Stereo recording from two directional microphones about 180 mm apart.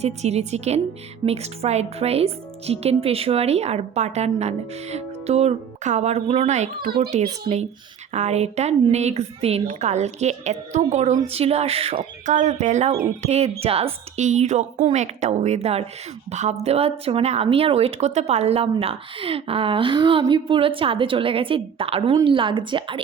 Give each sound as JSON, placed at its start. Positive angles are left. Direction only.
{"t": 0.0, "sound": "speech", "side_deg": -35}
{"t": 6.7, "sound": "a child's voice", "side_deg": -25}